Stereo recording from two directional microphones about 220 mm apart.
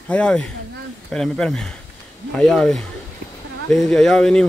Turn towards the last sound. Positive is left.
turn(degrees=5)  # may be behind; listen again after turning